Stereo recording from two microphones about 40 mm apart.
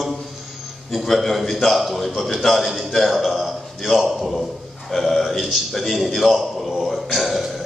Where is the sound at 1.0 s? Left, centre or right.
Centre.